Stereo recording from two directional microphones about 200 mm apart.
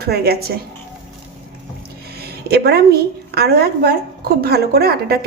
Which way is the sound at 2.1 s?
55° right (ahead or behind).